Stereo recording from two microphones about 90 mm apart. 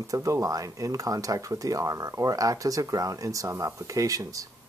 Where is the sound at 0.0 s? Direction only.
40° right (ahead or behind).